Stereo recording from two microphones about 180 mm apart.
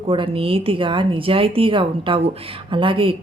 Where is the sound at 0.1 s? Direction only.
30° right (ahead or behind).